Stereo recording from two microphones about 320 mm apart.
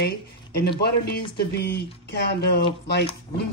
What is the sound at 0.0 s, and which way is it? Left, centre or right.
Speech, left.